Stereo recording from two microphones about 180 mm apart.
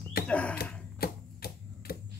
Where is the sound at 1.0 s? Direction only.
60° left (ahead or behind).